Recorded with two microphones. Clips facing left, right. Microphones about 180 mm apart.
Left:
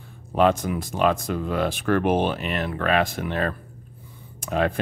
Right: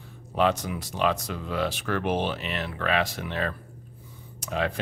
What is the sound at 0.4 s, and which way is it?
Speech, 50° left (ahead or behind).